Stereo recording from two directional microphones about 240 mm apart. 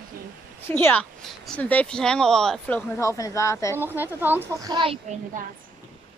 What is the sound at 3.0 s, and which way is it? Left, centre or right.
Speech, centre.